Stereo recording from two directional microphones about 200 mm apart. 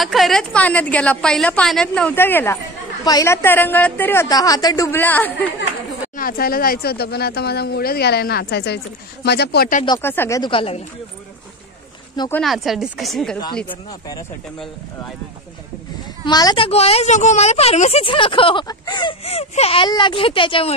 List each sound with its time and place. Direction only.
0.0 s a woman's voice: centre (ahead or behind)
6.1 s speech: 45° left (ahead or behind)
9.8 s a woman's voice: 10° left (ahead or behind); by 10.8 s 25° left (ahead or behind)
12.3 s speech: centre (ahead or behind)
14.6 s speech: centre (ahead or behind)
16.3 s a woman's voice: 20° left (ahead or behind)